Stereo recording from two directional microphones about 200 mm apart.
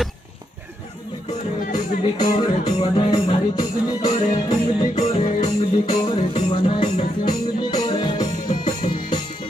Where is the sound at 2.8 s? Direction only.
30° left (ahead or behind).